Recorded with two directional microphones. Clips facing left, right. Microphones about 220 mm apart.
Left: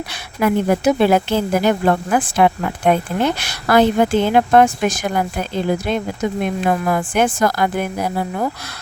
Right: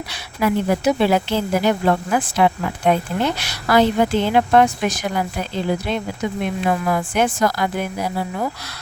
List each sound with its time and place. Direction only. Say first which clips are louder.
0.1 s speech: left 2 dB; 50° left (ahead or behind)